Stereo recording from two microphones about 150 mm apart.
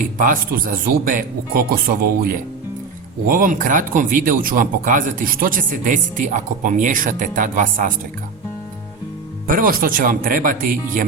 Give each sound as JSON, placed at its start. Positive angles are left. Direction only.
{"t": 0.0, "sound": "speech", "side_deg": -65}
{"t": 3.2, "sound": "speech", "side_deg": -65}
{"t": 9.5, "sound": "speech", "side_deg": -70}